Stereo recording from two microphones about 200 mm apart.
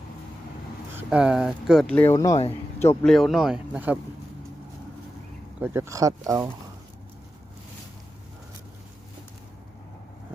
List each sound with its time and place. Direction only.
0.9 s speech: 5° right (ahead or behind); by 3.1 s 15° left (ahead or behind)
3.1 s speech: centre (ahead or behind)
5.5 s speech: 10° right (ahead or behind)